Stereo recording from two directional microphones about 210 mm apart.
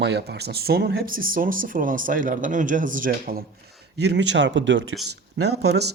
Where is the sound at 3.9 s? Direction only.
55° right (ahead or behind).